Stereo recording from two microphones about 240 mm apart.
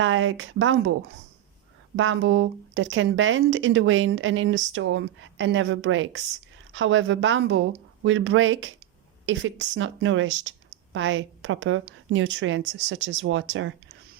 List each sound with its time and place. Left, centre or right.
0.0 s speech: right
2.0 s speech: right